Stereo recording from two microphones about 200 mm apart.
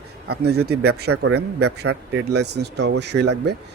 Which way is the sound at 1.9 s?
90° right.